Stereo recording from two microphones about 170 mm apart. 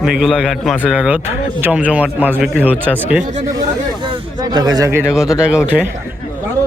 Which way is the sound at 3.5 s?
25° right (ahead or behind).